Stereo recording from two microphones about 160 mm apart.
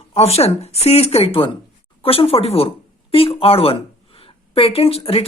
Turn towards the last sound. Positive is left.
turn(degrees=35)  # may be behind; listen again after turning